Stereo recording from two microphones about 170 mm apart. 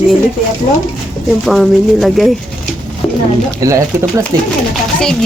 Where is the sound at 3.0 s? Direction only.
5° left (ahead or behind).